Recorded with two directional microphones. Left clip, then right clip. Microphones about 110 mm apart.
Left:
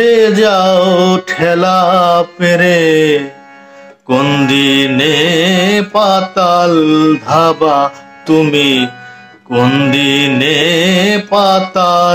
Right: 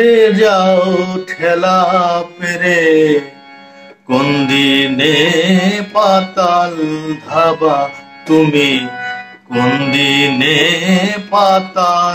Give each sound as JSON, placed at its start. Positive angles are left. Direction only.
{"t": 0.0, "sound": "mantra", "side_deg": 25}